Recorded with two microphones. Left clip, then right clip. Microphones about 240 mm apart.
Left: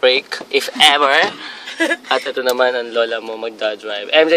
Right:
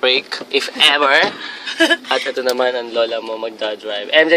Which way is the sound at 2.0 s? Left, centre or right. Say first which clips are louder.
Left 1 dB; centre.